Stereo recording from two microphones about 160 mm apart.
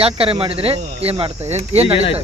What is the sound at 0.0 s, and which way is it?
Speech, 35° right (ahead or behind).